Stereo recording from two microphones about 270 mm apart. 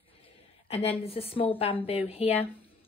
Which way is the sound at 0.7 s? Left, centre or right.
Left.